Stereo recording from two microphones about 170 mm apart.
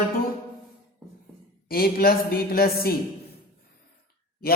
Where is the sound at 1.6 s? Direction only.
60° left (ahead or behind).